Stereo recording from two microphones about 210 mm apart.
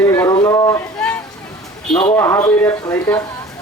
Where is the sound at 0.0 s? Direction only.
10° left (ahead or behind).